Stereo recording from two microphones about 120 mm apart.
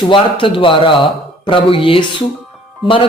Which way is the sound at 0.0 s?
40° left (ahead or behind).